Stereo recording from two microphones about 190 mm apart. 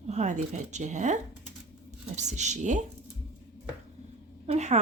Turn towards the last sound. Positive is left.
turn(degrees=-35)  # may be behind; listen again after turning